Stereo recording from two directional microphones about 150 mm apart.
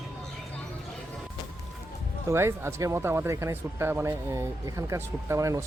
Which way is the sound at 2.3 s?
15° right (ahead or behind).